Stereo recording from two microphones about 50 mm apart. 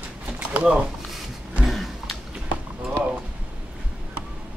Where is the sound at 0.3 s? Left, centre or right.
Right.